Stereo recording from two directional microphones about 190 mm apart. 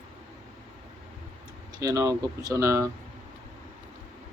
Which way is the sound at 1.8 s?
20° right (ahead or behind).